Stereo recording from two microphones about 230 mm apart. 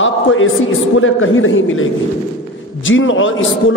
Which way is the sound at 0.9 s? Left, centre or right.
Left.